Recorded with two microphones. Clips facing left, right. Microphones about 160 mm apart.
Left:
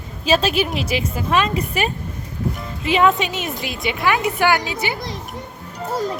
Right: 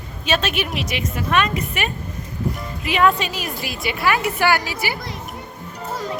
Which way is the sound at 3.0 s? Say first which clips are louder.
Left 1 dB; 20° left (ahead or behind).